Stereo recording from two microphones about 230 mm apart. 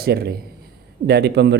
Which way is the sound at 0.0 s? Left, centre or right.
Right.